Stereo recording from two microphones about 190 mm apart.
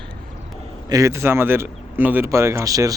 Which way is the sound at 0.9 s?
15° right (ahead or behind).